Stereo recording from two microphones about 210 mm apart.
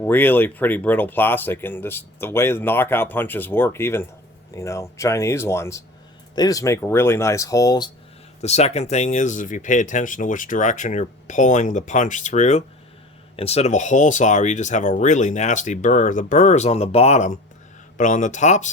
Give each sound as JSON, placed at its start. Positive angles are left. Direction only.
{"t": 0.0, "sound": "speech", "side_deg": 10}
{"t": 8.4, "sound": "speech", "side_deg": 30}